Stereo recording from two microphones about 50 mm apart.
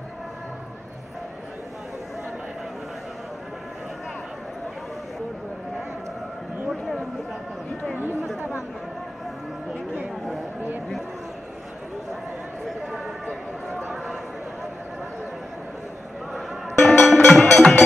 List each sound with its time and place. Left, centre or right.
8.0 s speech: right
12.6 s a sound: centre
16.8 s music: centre
17.4 s music: centre